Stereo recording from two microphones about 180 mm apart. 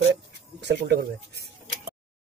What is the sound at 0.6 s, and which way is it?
Speech, 70° right (ahead or behind).